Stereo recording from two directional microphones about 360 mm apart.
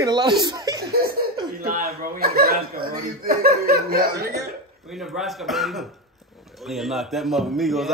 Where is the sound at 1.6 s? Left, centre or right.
Right.